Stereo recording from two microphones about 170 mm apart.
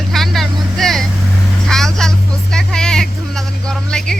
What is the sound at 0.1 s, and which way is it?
Vehicle, centre (ahead or behind).